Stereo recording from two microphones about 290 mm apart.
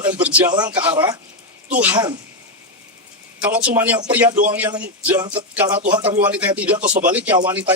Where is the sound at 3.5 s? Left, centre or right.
Centre.